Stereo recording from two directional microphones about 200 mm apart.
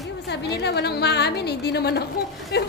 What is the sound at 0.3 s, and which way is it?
A woman's voice, 55° left (ahead or behind).